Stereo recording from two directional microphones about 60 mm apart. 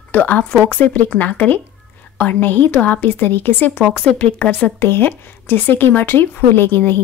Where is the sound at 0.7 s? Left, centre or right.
Left.